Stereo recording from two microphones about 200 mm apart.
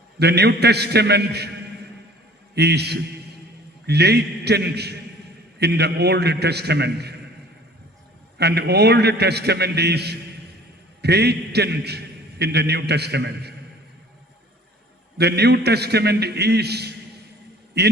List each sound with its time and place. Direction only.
0.2 s a man's voice: 55° right (ahead or behind)
2.6 s a man's voice: 55° right (ahead or behind)
8.4 s a man's voice: 55° right (ahead or behind)
15.2 s a man's voice: 55° right (ahead or behind)